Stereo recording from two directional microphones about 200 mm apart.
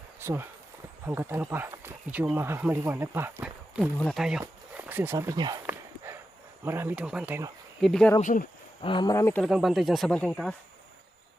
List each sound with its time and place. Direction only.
0.2 s speech: 10° right (ahead or behind)
5.6 s walk: 10° right (ahead or behind)
6.7 s speech: 10° right (ahead or behind)
7.8 s speech: centre (ahead or behind)
8.2 s speech: 40° left (ahead or behind)
8.8 s speech: 25° left (ahead or behind)
9.4 s speech: centre (ahead or behind)